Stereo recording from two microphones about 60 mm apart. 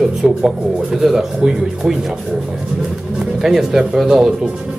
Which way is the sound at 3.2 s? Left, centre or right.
Centre.